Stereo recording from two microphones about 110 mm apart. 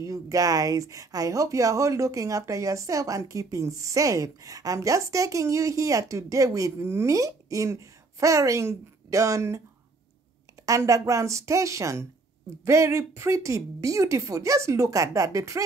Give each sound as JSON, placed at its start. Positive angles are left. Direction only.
{"t": 0.0, "sound": "speech", "side_deg": -30}
{"t": 10.6, "sound": "speech", "side_deg": -30}